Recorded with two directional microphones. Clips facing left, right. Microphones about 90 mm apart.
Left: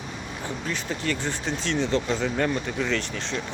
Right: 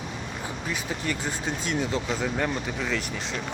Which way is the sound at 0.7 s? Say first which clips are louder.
Left 2 dB; 10° right (ahead or behind).